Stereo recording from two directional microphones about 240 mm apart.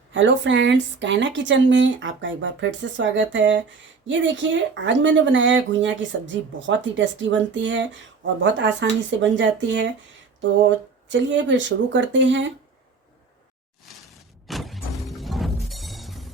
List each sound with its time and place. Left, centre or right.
0.1 s speech: right
11.1 s speech: right
14.4 s music: centre